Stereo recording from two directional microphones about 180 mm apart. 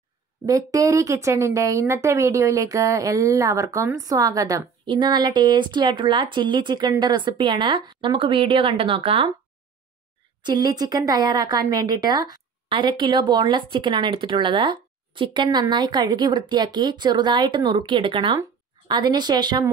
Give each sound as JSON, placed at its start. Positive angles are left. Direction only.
{"t": 0.5, "sound": "a woman's voice", "side_deg": -20}
{"t": 10.4, "sound": "a woman's voice", "side_deg": -20}